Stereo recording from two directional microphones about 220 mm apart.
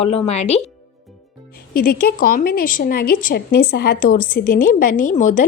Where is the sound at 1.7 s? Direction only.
40° left (ahead or behind).